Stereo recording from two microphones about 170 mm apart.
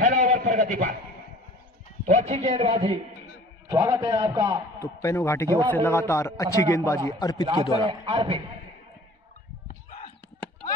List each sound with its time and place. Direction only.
0.0 s a sound: 50° right (ahead or behind)
2.0 s a man's voice: 45° right (ahead or behind)
3.6 s a man's voice: 15° right (ahead or behind)
4.7 s a man's voice: 15° left (ahead or behind)
8.0 s a man's voice: 30° right (ahead or behind)
9.7 s a sound: 50° left (ahead or behind)